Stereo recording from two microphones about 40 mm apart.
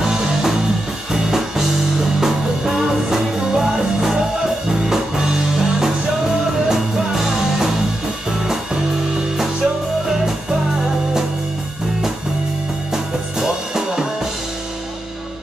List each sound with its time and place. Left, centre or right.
0.0 s music: centre
12.9 s music: centre